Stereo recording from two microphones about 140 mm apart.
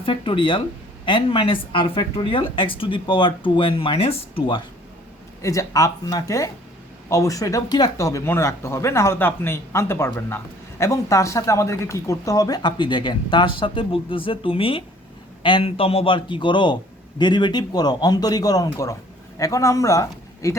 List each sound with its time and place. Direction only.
0.0 s speech: 40° left (ahead or behind)
5.4 s speech: 25° left (ahead or behind)